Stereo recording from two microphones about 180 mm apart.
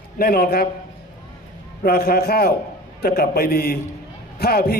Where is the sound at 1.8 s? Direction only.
55° left (ahead or behind).